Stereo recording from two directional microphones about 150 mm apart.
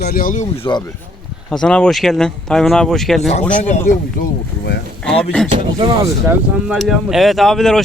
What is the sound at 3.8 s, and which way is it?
Speech, 80° left.